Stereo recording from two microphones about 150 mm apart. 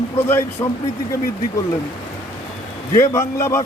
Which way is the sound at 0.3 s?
15° left (ahead or behind).